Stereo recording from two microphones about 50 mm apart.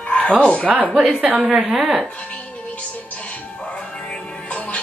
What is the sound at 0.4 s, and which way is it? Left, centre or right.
Speech, left.